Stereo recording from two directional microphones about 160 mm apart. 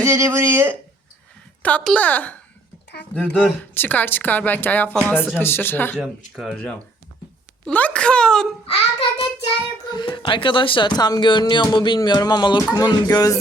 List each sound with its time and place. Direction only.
0.0 s speech: 20° right (ahead or behind)
1.6 s speech: 5° left (ahead or behind)
3.3 s speech: 10° left (ahead or behind)
6.0 s speech: centre (ahead or behind)
8.6 s child singing: 35° left (ahead or behind)
9.9 s speech: 30° left (ahead or behind)